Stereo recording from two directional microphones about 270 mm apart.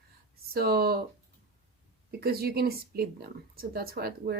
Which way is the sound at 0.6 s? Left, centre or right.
Right.